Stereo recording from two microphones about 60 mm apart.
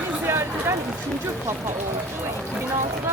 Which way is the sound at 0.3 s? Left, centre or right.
Right.